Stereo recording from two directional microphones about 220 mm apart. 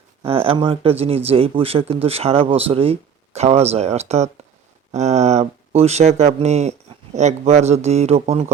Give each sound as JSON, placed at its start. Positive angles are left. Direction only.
{"t": 0.3, "sound": "speech", "side_deg": -25}